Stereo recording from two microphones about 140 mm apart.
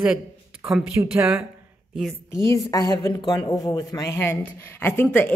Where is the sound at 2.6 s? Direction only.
25° left (ahead or behind).